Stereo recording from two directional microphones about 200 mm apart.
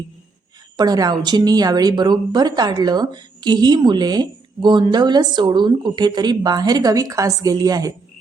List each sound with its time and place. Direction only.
0.8 s a woman's voice: 20° right (ahead or behind)